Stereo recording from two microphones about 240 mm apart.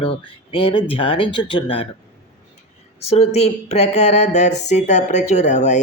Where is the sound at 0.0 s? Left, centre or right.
Left.